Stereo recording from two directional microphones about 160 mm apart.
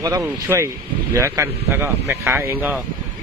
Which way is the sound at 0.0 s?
20° right (ahead or behind).